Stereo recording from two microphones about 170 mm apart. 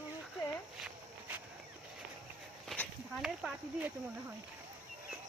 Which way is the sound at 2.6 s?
Centre (ahead or behind).